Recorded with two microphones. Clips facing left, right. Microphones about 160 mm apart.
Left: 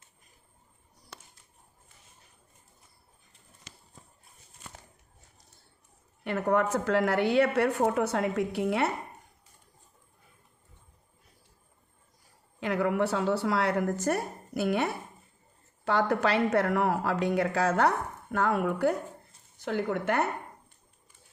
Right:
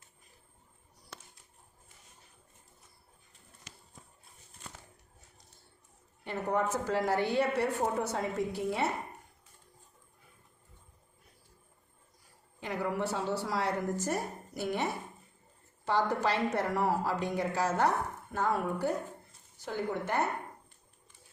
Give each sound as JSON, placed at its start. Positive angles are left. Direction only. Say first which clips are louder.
{"t": 6.2, "sound": "a woman's voice", "louder": "left 5 dB", "side_deg": 75}
{"t": 12.5, "sound": "a woman's voice", "louder": "left 7 dB", "side_deg": 80}